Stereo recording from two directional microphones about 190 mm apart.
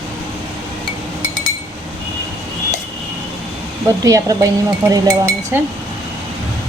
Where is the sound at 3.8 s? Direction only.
15° right (ahead or behind).